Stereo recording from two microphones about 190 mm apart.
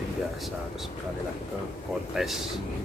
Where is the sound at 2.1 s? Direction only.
Centre (ahead or behind).